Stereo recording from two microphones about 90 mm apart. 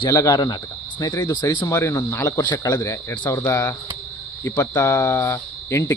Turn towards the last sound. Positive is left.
turn(degrees=30)  # may be behind; listen again after turning